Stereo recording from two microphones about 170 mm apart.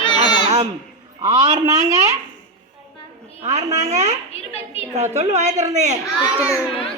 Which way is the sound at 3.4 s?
40° right (ahead or behind).